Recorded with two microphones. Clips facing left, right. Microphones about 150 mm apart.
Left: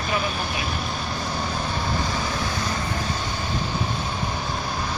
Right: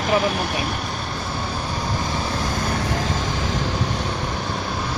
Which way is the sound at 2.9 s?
90° right.